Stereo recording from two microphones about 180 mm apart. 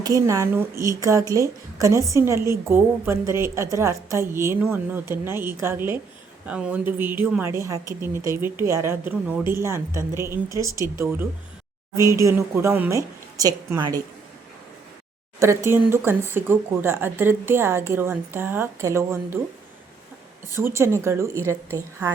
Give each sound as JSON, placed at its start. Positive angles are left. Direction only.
{"t": 0.0, "sound": "a woman's voice", "side_deg": -20}
{"t": 15.4, "sound": "a woman's voice", "side_deg": -15}
{"t": 20.7, "sound": "a woman's voice", "side_deg": -15}